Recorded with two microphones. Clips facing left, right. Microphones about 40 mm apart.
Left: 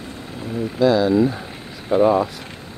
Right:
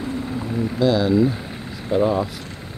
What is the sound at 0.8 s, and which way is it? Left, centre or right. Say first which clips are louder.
Speech: left 3 dB; centre.